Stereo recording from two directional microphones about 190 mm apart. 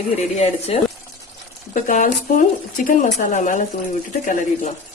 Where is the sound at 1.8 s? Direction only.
45° left (ahead or behind).